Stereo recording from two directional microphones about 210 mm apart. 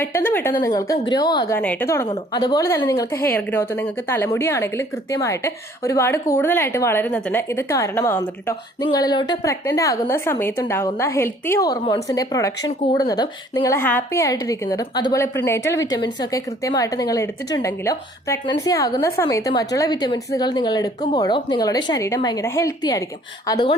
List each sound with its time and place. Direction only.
0.3 s a woman's voice: 10° left (ahead or behind)